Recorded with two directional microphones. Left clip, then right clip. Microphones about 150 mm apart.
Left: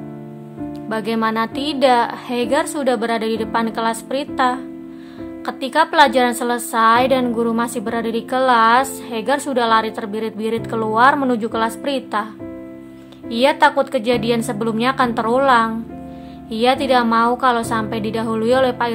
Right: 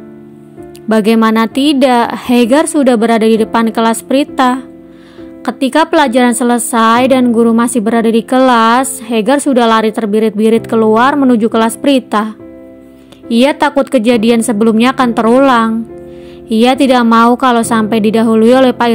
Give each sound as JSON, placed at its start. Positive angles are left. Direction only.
{"t": 0.8, "sound": "a woman's voice", "side_deg": -45}